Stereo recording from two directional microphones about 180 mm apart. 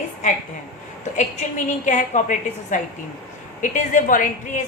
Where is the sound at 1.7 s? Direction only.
40° left (ahead or behind).